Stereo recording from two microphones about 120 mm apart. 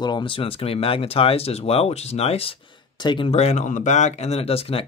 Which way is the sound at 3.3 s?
60° left (ahead or behind).